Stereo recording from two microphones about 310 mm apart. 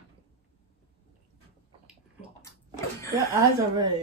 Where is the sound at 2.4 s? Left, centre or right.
Centre.